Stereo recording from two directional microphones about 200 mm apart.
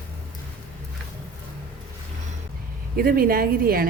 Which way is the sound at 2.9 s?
45° right (ahead or behind).